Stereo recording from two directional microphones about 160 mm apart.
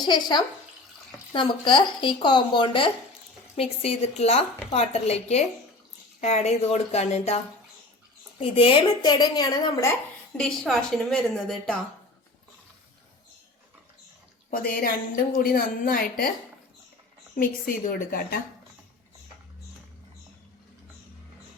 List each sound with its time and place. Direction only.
0.0 s a woman's voice: 25° left (ahead or behind)
10.3 s speech: 5° left (ahead or behind)
14.5 s a woman's voice: 65° left (ahead or behind)
17.8 s speech: 60° left (ahead or behind)